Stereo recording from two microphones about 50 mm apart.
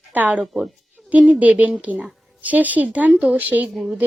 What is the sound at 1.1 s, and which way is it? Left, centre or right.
A woman's voice, right.